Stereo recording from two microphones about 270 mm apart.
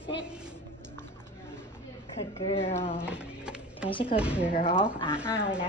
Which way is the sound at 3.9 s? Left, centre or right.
Centre.